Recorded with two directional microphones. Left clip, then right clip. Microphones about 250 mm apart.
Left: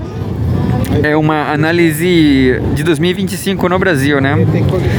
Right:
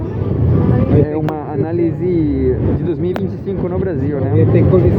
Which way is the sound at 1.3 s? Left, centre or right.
Left.